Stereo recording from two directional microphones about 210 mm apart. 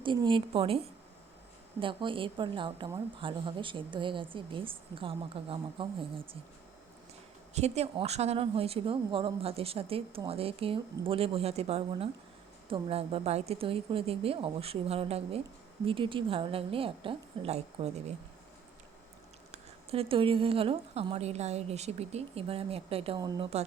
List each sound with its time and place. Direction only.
0.0 s speech: 25° right (ahead or behind)
1.8 s speech: 25° right (ahead or behind)
7.5 s speech: 30° right (ahead or behind)
19.5 s speech: 30° right (ahead or behind)